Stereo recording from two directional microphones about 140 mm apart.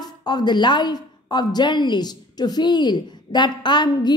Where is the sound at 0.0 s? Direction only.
30° left (ahead or behind).